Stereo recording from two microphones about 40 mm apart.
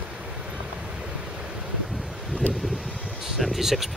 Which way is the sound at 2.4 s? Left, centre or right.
Left.